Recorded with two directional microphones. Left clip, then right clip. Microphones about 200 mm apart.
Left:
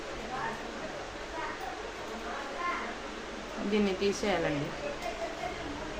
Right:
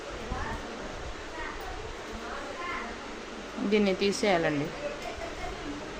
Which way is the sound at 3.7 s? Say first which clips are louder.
Right 3 dB; 40° right (ahead or behind).